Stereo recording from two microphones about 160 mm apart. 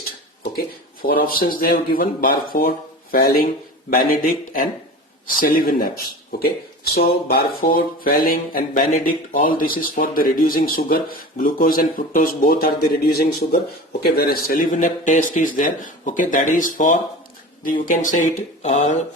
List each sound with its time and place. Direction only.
1.0 s speech: 65° left (ahead or behind)
6.9 s speech: 65° left (ahead or behind); by 19.0 s 45° left (ahead or behind)